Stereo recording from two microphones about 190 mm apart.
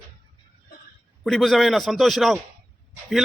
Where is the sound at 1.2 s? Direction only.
Centre (ahead or behind).